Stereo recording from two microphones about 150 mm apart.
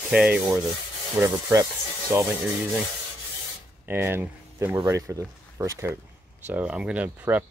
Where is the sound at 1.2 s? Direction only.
15° right (ahead or behind).